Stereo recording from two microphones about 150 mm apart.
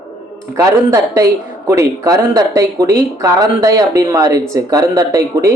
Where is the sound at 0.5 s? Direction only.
20° right (ahead or behind).